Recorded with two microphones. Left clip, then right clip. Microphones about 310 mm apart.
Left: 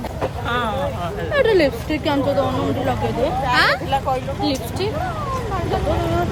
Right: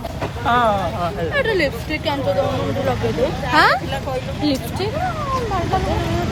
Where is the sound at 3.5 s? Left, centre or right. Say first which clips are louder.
Right 4 dB; centre.